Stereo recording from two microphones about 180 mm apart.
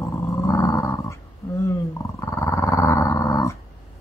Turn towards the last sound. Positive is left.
turn(degrees=15)  # may be behind; listen again after turning